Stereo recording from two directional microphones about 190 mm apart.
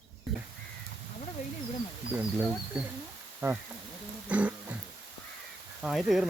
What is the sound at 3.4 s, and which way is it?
Speech, 15° right (ahead or behind).